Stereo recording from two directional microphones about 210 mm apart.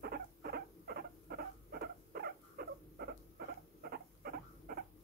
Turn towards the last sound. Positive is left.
turn(degrees=-45)  # may be behind; listen again after turning